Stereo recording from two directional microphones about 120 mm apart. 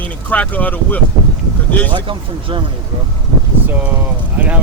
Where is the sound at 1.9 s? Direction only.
45° right (ahead or behind).